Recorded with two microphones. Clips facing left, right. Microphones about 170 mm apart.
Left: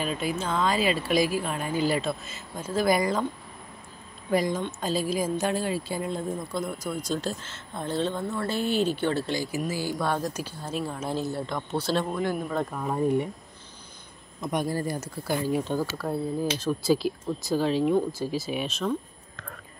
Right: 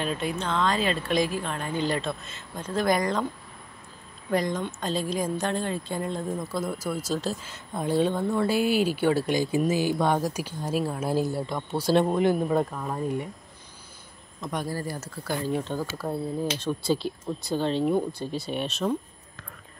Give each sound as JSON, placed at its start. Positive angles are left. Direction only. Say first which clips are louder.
{"t": 0.0, "sound": "speech", "louder": "even", "side_deg": 0}
{"t": 4.3, "sound": "speech", "louder": "left 1 dB", "side_deg": 5}
{"t": 12.0, "sound": "speech", "louder": "right 6 dB", "side_deg": -20}
{"t": 12.7, "sound": "speech", "louder": "left 2 dB", "side_deg": 10}
{"t": 14.4, "sound": "speech", "louder": "left 3 dB", "side_deg": 15}